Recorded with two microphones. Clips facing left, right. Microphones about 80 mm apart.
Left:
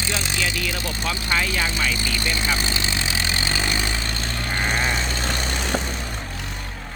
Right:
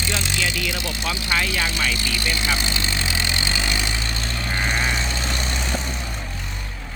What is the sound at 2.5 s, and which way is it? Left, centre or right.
Vehicle, left.